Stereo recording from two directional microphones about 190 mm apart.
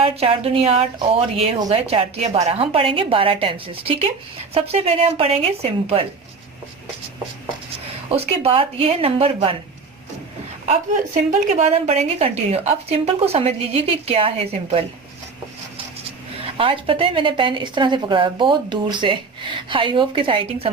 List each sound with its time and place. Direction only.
0.0 s a woman's voice: 30° right (ahead or behind)
8.1 s a woman's voice: 30° right (ahead or behind)
10.7 s a woman's voice: 40° right (ahead or behind)
16.4 s a woman's voice: 30° right (ahead or behind)